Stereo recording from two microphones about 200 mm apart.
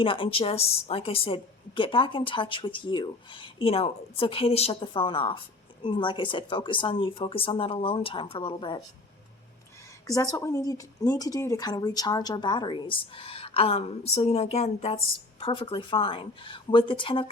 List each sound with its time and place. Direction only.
0.0 s a woman's voice: 25° left (ahead or behind)
10.1 s a woman's voice: 15° left (ahead or behind)